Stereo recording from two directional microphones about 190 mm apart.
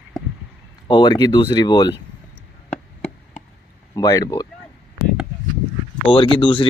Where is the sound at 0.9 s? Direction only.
20° left (ahead or behind).